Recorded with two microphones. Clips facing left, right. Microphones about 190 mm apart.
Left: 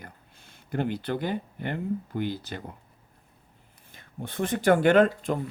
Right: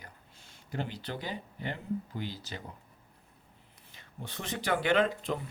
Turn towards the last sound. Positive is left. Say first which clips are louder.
# left 7 dB
turn(degrees=50)  # may be behind; listen again after turning